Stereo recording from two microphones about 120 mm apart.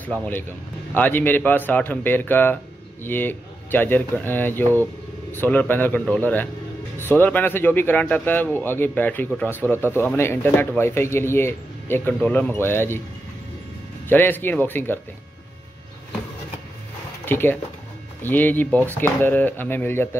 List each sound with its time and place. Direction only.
0.0 s a man's voice: 10° left (ahead or behind)
14.0 s a man's voice: 15° left (ahead or behind)
17.2 s a man's voice: 20° left (ahead or behind)